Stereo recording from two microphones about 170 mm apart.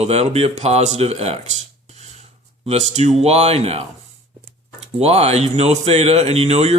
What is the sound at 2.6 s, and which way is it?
Speech, 40° right (ahead or behind).